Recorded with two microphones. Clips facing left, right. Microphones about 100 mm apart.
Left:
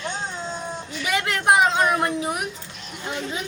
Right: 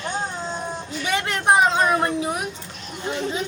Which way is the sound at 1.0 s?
25° right (ahead or behind).